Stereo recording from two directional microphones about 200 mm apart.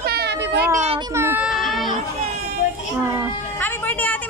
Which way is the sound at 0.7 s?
30° right (ahead or behind).